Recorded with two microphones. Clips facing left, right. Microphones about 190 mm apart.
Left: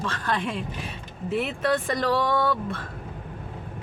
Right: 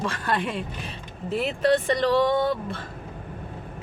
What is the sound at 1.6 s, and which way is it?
Speech, 25° right (ahead or behind).